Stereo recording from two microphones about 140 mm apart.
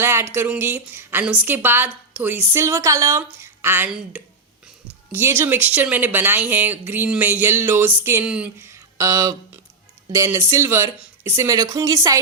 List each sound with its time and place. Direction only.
0.0 s speech: 20° right (ahead or behind)
5.1 s speech: 15° right (ahead or behind)
8.6 s a sound: 25° right (ahead or behind)
10.1 s speech: 20° right (ahead or behind)